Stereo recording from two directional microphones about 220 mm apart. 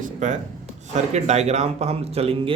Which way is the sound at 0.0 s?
35° right (ahead or behind).